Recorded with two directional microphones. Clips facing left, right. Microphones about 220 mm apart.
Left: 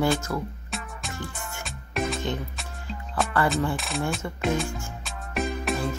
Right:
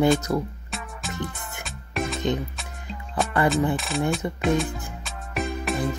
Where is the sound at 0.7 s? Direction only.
Centre (ahead or behind).